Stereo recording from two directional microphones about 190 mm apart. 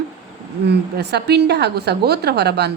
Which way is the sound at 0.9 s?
60° right (ahead or behind).